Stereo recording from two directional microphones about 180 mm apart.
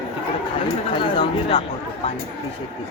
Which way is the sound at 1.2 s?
25° left (ahead or behind).